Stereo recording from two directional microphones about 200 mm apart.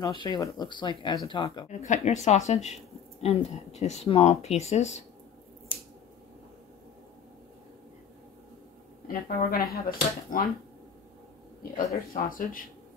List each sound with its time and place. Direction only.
0.0 s speech: 20° left (ahead or behind)
1.7 s speech: 35° left (ahead or behind)
9.0 s speech: 45° left (ahead or behind)
12.3 s speech: 45° left (ahead or behind)